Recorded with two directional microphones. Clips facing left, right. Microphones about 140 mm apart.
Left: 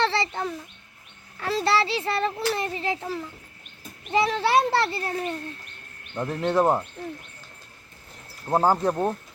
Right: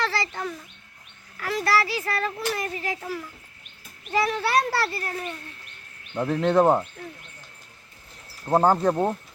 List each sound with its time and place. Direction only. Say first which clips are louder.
0.0 s a sound: left 3 dB; 25° left (ahead or behind)
1.4 s a child's voice: left 1 dB; 25° left (ahead or behind)
6.1 s speech: right 3 dB; centre (ahead or behind)
8.4 s speech: right 2 dB; 5° left (ahead or behind)